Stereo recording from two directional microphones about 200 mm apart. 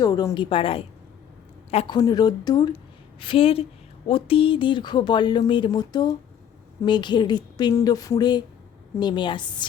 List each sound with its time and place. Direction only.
0.0 s speech: 20° left (ahead or behind)
2.0 s a woman's voice: 20° left (ahead or behind)